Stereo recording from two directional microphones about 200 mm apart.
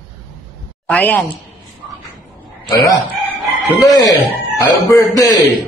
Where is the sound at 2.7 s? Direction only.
15° left (ahead or behind).